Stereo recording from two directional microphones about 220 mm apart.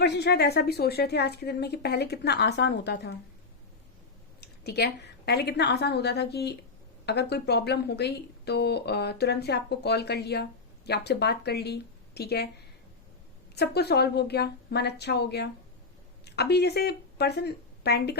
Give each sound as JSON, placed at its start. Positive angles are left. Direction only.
{"t": 0.0, "sound": "a woman's voice", "side_deg": 50}
{"t": 4.4, "sound": "a woman's voice", "side_deg": 45}
{"t": 13.6, "sound": "a woman's voice", "side_deg": 50}